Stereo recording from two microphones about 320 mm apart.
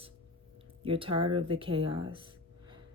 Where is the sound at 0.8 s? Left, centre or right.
Centre.